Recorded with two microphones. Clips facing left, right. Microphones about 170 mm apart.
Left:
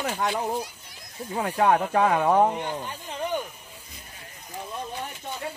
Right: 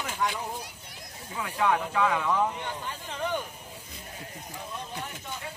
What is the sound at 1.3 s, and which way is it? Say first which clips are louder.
Speech: left 5 dB; 45° left (ahead or behind).